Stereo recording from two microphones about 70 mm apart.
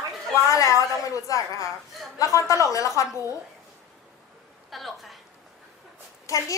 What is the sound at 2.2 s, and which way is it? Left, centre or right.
Speech, left.